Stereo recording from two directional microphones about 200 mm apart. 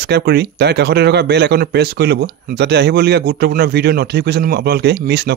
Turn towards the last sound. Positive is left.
turn(degrees=-55)  # may be behind; listen again after turning